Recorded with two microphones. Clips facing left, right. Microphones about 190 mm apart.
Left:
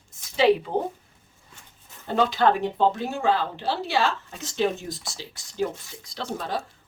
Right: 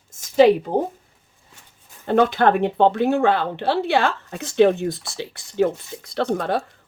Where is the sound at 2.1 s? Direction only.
55° right (ahead or behind).